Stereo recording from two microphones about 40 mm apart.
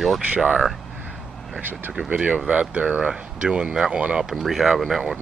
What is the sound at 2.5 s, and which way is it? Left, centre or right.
Speech, right.